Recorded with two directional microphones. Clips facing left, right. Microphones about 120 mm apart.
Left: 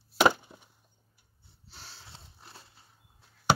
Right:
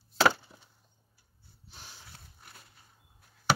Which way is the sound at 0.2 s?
15° left (ahead or behind).